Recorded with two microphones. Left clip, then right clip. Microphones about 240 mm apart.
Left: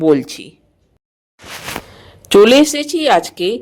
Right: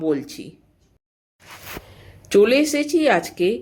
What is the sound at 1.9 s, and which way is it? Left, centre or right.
A woman's voice, left.